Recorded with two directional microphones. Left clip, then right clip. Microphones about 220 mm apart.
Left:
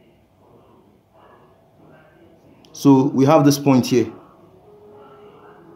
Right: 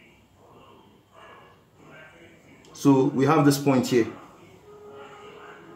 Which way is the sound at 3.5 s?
40° left (ahead or behind).